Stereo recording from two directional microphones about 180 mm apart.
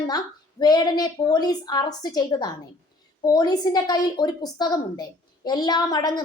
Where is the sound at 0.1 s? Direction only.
20° left (ahead or behind).